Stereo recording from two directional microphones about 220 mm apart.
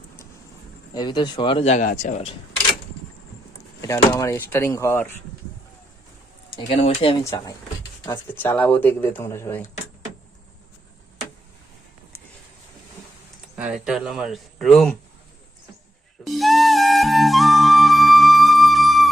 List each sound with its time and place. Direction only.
0.9 s speech: 20° left (ahead or behind)
3.8 s speech: 10° left (ahead or behind)
6.7 s speech: 25° left (ahead or behind)
13.6 s speech: 5° right (ahead or behind)
16.2 s flute: centre (ahead or behind)